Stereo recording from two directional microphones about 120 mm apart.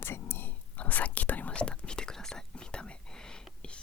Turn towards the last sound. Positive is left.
turn(degrees=5)  # may be behind; listen again after turning